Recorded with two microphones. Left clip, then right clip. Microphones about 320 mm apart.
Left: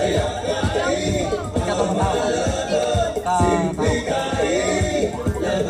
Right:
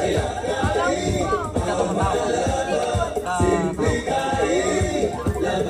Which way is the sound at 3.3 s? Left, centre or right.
Left.